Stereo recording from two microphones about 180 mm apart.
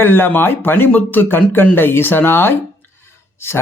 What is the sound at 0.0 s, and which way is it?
Speech, 10° left (ahead or behind).